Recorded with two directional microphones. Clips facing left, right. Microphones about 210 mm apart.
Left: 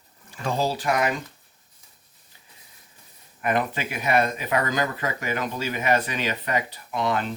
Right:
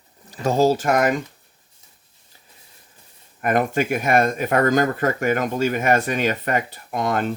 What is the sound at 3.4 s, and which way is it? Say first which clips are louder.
Speech: right 5 dB; 50° right (ahead or behind).